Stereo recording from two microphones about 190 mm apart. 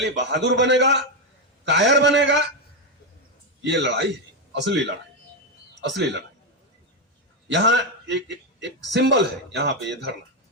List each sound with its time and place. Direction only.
0.0 s a man's voice: 65° right (ahead or behind)
3.6 s a man's voice: 70° right (ahead or behind)
7.4 s a man's voice: 70° right (ahead or behind)